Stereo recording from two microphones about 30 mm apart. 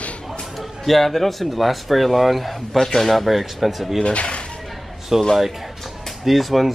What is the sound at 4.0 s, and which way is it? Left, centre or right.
Speech, left.